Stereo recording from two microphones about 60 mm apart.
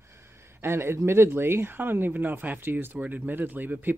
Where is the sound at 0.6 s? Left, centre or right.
Right.